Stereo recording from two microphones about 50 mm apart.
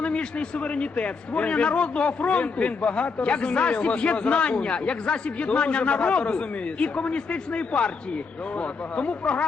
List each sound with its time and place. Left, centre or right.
0.0 s a man's voice: left